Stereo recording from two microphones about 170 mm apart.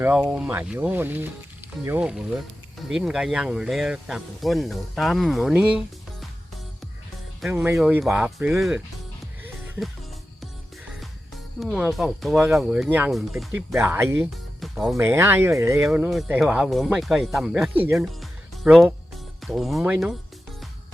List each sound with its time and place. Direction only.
0.0 s speech: 5° right (ahead or behind)
7.4 s speech: 10° right (ahead or behind)
11.6 s speech: centre (ahead or behind)
14.6 s music: centre (ahead or behind)
14.9 s speech: 15° right (ahead or behind)
15.9 s speech: 5° right (ahead or behind)